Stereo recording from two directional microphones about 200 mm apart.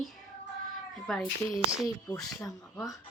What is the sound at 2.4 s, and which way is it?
Speech, 15° left (ahead or behind).